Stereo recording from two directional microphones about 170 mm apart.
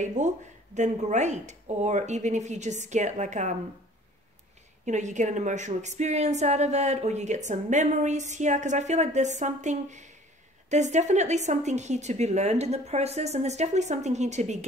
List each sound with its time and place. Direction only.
0.2 s a woman's voice: 45° right (ahead or behind)
4.8 s a woman's voice: 45° right (ahead or behind)